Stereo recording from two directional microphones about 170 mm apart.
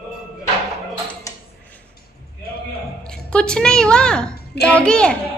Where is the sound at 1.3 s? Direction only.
20° left (ahead or behind).